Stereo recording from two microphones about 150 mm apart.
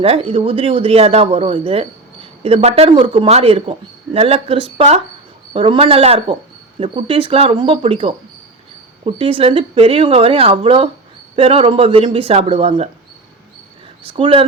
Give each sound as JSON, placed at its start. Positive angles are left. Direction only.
{"t": 0.0, "sound": "a man's voice", "side_deg": -40}
{"t": 14.2, "sound": "a man's voice", "side_deg": -35}